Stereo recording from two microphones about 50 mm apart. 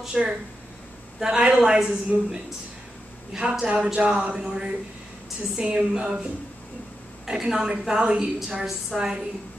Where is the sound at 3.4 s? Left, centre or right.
Centre.